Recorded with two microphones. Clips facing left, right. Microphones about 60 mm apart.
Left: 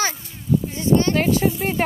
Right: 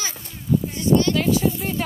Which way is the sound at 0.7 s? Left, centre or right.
Left.